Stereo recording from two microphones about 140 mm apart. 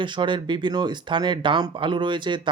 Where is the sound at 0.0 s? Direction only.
35° right (ahead or behind).